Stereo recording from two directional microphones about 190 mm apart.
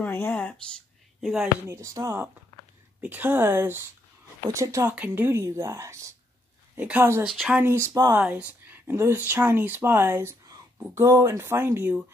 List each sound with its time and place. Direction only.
0.0 s speech: 10° left (ahead or behind)
1.7 s speech: 15° right (ahead or behind)